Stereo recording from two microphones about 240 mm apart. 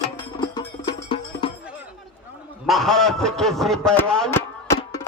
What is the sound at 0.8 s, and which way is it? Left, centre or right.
Music, left.